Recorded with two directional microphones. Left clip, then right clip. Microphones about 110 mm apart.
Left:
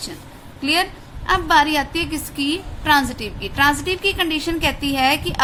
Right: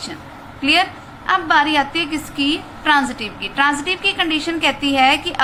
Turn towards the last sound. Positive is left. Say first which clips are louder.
# right 4 dB
turn(degrees=40)  # may be behind; listen again after turning